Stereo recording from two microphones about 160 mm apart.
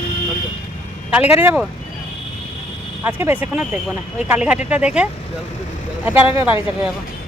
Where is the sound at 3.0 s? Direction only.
10° right (ahead or behind).